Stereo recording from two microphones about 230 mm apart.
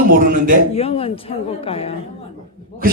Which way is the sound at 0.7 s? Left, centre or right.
Left.